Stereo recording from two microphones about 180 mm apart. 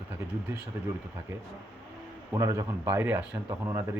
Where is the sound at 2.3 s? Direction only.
15° right (ahead or behind).